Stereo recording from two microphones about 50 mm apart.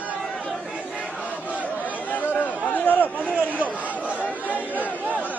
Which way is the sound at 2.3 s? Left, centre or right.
Left.